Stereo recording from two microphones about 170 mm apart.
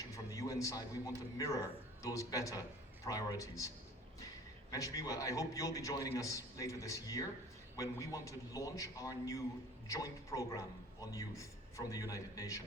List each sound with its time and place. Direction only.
0.1 s a man's voice: 20° left (ahead or behind)
4.7 s a man's voice: 20° left (ahead or behind)